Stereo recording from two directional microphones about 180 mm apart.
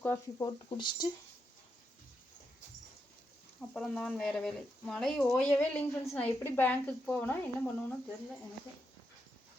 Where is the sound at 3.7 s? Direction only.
5° left (ahead or behind).